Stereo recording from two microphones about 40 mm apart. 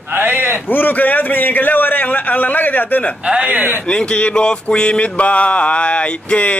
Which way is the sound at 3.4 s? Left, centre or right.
Right.